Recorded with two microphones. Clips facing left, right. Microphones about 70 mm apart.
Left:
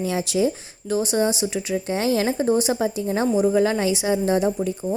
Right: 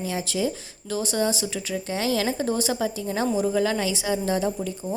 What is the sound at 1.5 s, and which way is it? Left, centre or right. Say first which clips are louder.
Speech: left 5 dB; left.